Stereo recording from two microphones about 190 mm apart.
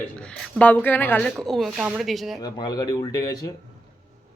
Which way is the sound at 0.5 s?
10° left (ahead or behind).